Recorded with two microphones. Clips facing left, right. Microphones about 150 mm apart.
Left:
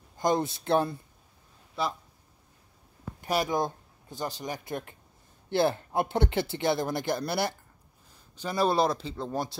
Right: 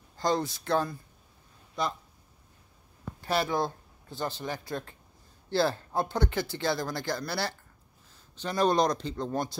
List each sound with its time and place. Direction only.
0.2 s speech: 20° left (ahead or behind)
1.8 s speech: 5° left (ahead or behind)
3.2 s speech: 15° left (ahead or behind)
8.4 s speech: 5° left (ahead or behind)